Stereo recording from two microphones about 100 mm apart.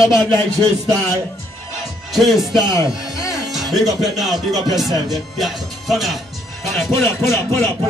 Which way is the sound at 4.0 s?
Centre (ahead or behind).